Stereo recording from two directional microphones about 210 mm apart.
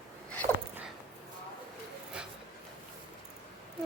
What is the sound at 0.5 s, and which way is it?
Dog, 10° left (ahead or behind).